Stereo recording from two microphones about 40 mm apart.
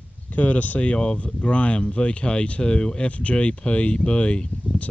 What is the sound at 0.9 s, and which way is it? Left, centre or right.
Speech, left.